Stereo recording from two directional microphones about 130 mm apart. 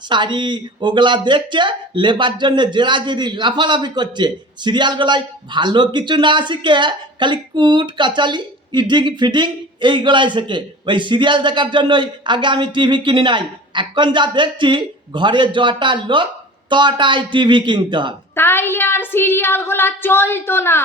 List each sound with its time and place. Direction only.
0.1 s speech: 35° right (ahead or behind)
18.3 s child singing: 15° left (ahead or behind)